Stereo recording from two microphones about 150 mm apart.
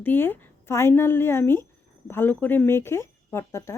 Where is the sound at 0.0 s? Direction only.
15° left (ahead or behind).